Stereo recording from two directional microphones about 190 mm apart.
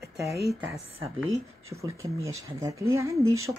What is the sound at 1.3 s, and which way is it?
Speech, 15° right (ahead or behind).